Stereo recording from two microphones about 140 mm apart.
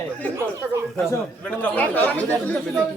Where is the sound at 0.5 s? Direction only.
20° right (ahead or behind).